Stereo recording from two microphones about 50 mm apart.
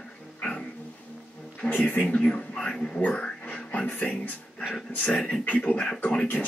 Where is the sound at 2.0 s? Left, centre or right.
Centre.